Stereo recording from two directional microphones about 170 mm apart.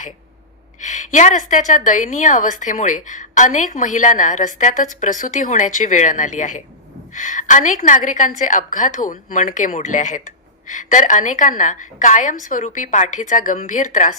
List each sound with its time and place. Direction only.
0.8 s a woman's voice: 45° left (ahead or behind)